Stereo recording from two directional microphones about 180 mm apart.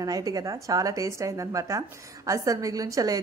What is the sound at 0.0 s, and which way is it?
A woman's voice, 20° right (ahead or behind).